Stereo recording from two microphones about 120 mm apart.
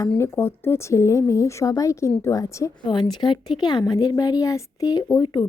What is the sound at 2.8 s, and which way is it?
Speech, 35° left (ahead or behind).